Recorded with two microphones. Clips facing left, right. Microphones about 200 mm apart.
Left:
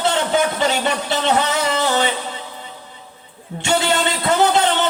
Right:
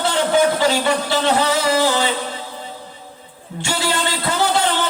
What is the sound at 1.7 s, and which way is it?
Music, 20° left (ahead or behind).